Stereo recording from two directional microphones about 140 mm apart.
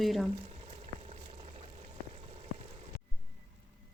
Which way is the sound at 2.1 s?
50° right (ahead or behind).